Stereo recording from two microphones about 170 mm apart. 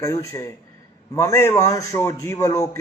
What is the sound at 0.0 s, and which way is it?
A man's voice, 20° left (ahead or behind).